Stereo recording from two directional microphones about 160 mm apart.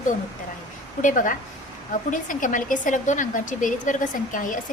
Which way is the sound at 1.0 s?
55° left (ahead or behind).